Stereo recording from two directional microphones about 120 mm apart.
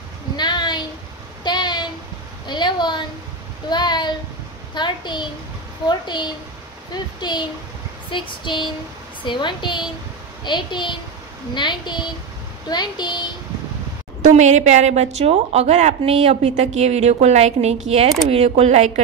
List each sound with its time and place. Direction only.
0.4 s a sound: 40° left (ahead or behind)
3.7 s a woman's voice: 35° left (ahead or behind)
14.2 s a woman's voice: 75° right (ahead or behind)